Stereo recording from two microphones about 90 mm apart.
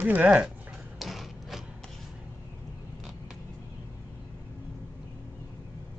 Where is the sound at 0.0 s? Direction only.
20° right (ahead or behind).